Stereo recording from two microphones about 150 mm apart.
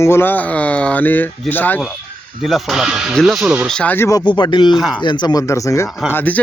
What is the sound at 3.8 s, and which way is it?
Speech, 15° left (ahead or behind).